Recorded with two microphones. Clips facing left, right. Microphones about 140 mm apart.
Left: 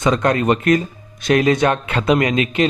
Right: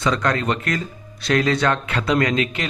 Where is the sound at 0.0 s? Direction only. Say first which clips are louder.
Left 4 dB; 20° left (ahead or behind).